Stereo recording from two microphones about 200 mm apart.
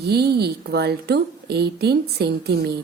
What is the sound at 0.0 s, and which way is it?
A woman's voice, 55° right (ahead or behind).